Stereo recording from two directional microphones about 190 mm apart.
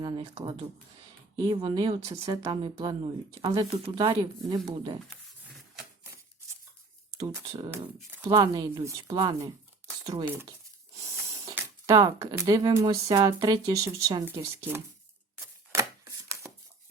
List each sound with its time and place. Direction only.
1.4 s speech: 20° right (ahead or behind)
7.2 s speech: 20° right (ahead or behind)
11.0 s speech: 15° right (ahead or behind)
15.7 s chopping: 15° right (ahead or behind)